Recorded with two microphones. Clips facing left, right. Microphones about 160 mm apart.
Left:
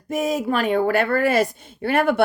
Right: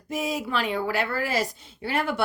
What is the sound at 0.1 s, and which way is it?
A woman's voice, 50° left (ahead or behind).